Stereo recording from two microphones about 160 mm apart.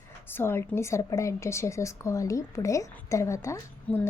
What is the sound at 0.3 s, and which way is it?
A woman's voice, 15° left (ahead or behind).